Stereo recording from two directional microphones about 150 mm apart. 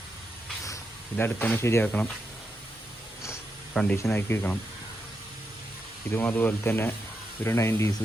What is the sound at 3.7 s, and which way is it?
Speech, 5° left (ahead or behind).